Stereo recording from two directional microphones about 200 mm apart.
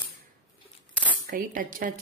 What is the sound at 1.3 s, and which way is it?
Speech, 45° right (ahead or behind).